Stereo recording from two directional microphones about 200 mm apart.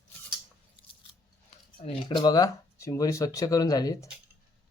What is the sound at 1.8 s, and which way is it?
Speech, 25° left (ahead or behind).